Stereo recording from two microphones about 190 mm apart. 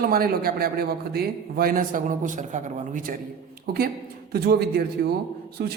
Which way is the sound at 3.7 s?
55° right (ahead or behind).